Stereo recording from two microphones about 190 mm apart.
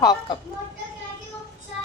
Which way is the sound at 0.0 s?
20° left (ahead or behind).